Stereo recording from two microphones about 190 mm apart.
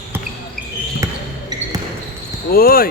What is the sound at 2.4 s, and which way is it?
Speech, 50° left (ahead or behind).